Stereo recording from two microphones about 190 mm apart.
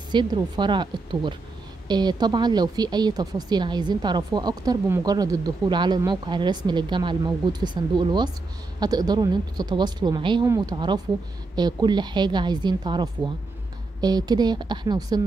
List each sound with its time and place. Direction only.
0.1 s a woman's voice: 25° right (ahead or behind)